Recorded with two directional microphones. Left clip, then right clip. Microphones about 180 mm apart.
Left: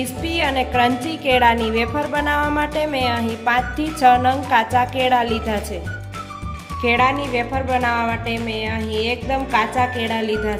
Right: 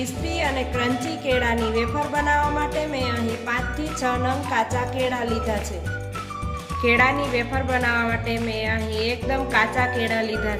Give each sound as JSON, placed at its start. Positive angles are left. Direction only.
{"t": 0.0, "sound": "music", "side_deg": 45}
{"t": 6.8, "sound": "a woman's voice", "side_deg": 30}